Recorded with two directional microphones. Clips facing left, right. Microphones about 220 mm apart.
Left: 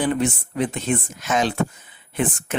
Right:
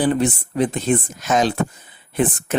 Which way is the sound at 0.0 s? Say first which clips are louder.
Right 3 dB; 35° right (ahead or behind).